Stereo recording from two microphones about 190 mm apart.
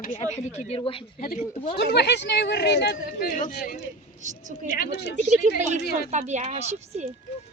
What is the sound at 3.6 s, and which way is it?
Speech, 60° left (ahead or behind).